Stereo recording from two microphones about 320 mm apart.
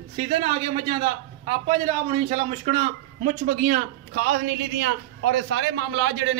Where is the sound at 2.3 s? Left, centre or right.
Centre; by 6.4 s right.